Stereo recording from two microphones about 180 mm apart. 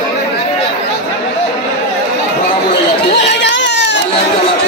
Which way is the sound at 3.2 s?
75° left (ahead or behind).